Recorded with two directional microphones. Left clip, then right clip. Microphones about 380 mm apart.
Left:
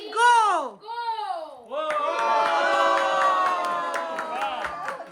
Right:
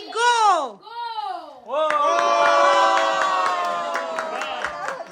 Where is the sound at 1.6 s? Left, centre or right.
Centre.